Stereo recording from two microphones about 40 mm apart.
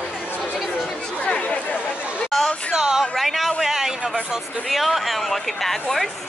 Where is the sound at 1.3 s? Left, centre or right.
Left.